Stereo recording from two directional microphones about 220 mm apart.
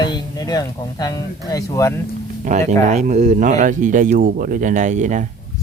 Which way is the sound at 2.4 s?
35° right (ahead or behind).